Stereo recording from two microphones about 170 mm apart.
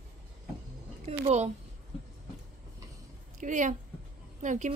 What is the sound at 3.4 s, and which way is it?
Speech, 45° right (ahead or behind).